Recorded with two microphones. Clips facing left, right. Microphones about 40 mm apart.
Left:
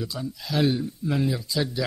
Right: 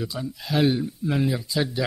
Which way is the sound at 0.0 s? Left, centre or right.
Centre.